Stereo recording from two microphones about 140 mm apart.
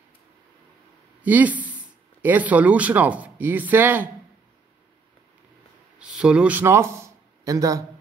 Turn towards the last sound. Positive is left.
turn(degrees=-25)  # may be behind; listen again after turning